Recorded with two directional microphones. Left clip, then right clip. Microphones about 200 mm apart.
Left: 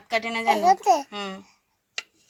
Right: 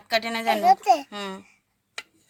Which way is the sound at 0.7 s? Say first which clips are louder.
Right 2 dB; 25° left (ahead or behind).